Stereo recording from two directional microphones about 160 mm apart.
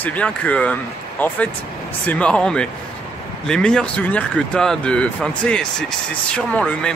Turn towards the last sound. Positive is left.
turn(degrees=5)  # may be behind; listen again after turning